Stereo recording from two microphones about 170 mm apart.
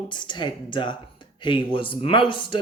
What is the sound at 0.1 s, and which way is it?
A man's voice, 25° left (ahead or behind).